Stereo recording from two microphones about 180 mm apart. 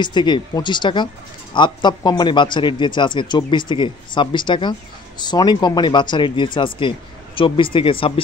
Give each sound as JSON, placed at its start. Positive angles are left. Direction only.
{"t": 0.0, "sound": "a man's voice", "side_deg": 25}